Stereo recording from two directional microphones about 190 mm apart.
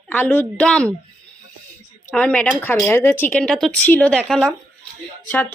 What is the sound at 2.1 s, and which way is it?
A woman's voice, 5° left (ahead or behind).